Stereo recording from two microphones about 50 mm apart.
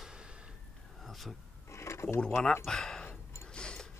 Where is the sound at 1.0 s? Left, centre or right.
Centre.